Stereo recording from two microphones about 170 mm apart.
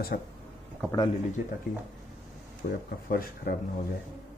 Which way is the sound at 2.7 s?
65° left (ahead or behind).